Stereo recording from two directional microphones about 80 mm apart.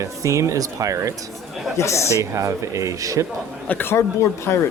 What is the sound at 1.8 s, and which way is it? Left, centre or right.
Speech, left.